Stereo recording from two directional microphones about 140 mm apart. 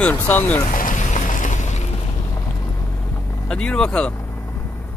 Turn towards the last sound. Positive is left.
turn(degrees=5)  # may be behind; listen again after turning